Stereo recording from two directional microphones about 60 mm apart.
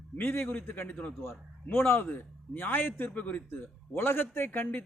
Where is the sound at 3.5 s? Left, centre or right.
Left.